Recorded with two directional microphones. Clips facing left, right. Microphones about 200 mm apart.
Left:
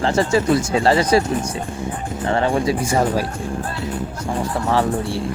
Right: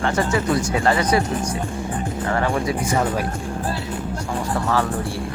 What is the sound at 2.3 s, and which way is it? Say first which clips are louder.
Speech: left 4 dB; 25° left (ahead or behind).